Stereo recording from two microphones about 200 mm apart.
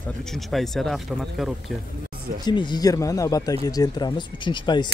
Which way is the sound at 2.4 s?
20° left (ahead or behind).